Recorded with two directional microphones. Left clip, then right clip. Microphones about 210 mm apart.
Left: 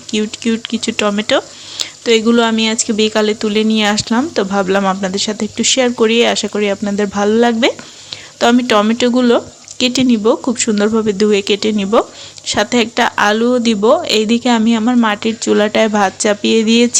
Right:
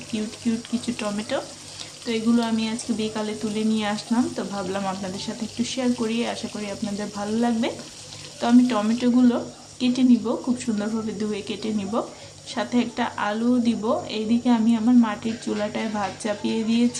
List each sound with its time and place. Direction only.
0.1 s speech: 35° left (ahead or behind)